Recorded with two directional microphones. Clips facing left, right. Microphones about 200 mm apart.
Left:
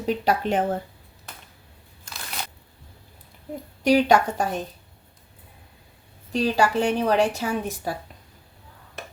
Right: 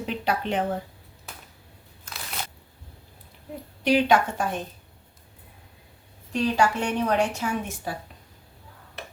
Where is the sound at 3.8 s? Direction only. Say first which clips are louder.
Left 2 dB; 40° left (ahead or behind).